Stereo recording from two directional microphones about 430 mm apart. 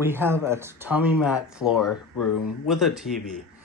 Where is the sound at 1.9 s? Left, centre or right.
Left.